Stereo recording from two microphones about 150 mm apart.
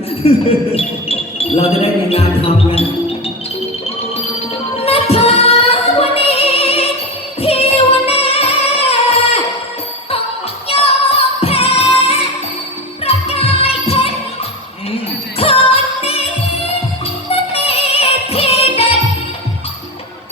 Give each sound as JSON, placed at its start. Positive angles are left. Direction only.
{"t": 0.2, "sound": "a sound", "side_deg": 40}
{"t": 2.0, "sound": "music", "side_deg": 40}
{"t": 4.9, "sound": "music", "side_deg": 40}
{"t": 10.7, "sound": "music", "side_deg": 40}
{"t": 15.4, "sound": "music", "side_deg": 40}
{"t": 17.2, "sound": "music", "side_deg": 40}